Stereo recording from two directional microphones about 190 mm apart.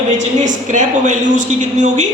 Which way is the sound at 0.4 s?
40° right (ahead or behind).